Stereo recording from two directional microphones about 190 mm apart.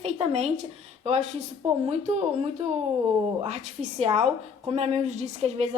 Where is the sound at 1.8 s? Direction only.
35° right (ahead or behind).